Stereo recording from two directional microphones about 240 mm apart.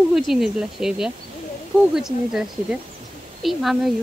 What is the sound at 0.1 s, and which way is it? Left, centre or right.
Speech, centre.